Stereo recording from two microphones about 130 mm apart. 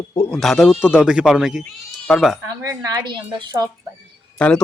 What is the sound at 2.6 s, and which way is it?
A woman's voice, 30° right (ahead or behind).